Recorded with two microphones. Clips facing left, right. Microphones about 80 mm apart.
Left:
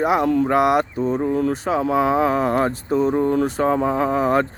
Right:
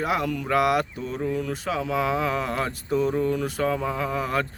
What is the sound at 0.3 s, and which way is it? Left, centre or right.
Speech, left.